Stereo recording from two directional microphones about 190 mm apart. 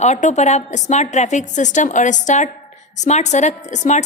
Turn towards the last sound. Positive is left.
turn(degrees=40)  # may be behind; listen again after turning